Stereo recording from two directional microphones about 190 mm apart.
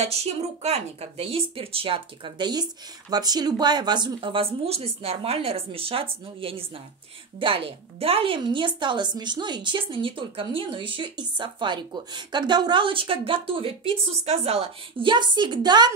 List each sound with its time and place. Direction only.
0.0 s a woman's voice: 35° right (ahead or behind)